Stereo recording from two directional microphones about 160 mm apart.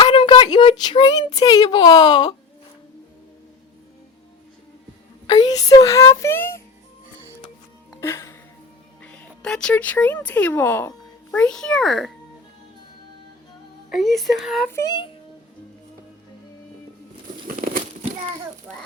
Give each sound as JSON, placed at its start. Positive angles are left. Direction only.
{"t": 0.0, "sound": "speech", "side_deg": 30}
{"t": 5.2, "sound": "speech", "side_deg": 30}
{"t": 8.0, "sound": "music", "side_deg": 15}
{"t": 9.0, "sound": "speech", "side_deg": 5}
{"t": 13.9, "sound": "speech", "side_deg": 0}
{"t": 14.7, "sound": "speech", "side_deg": 20}
{"t": 17.6, "sound": "a sound", "side_deg": -60}